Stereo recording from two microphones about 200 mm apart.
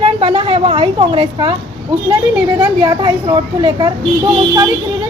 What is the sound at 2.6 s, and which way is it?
A woman's voice, 20° right (ahead or behind).